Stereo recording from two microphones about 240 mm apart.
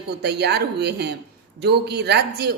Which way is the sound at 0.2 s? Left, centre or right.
Right.